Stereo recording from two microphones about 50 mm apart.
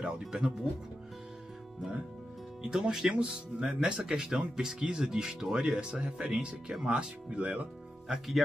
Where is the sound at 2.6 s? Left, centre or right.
Centre.